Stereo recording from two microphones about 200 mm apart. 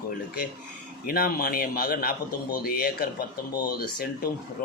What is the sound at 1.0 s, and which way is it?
A man's voice, 45° left (ahead or behind).